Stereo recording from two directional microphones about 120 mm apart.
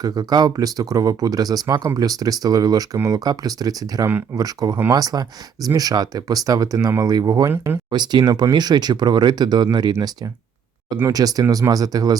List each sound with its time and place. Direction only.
0.0 s speech: 35° right (ahead or behind)
7.5 s speech: 15° right (ahead or behind)
7.9 s speech: 35° right (ahead or behind)
11.1 s speech: 30° right (ahead or behind)